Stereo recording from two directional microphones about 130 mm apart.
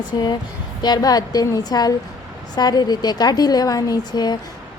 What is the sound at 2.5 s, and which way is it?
A woman's voice, 30° left (ahead or behind).